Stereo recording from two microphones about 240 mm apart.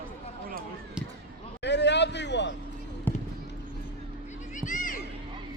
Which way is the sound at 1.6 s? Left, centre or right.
Left.